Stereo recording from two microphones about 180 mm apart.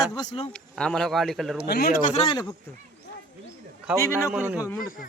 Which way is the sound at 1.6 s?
55° left (ahead or behind).